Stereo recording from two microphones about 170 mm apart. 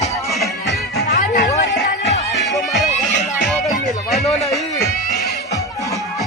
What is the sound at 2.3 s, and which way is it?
Music, centre (ahead or behind).